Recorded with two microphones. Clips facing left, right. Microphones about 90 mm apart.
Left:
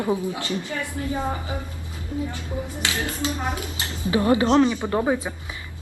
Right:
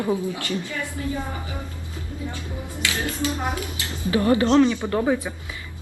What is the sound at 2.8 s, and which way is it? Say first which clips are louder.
A woman's voice: right 2 dB; 25° left (ahead or behind).